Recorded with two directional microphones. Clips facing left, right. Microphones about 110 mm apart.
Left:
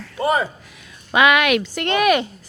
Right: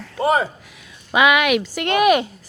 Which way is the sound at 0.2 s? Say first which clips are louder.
Right 1 dB; 35° right (ahead or behind).